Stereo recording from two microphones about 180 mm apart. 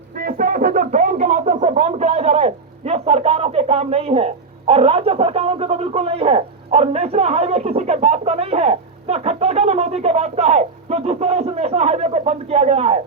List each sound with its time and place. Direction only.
0.2 s speech: 50° right (ahead or behind); by 13.0 s 35° right (ahead or behind)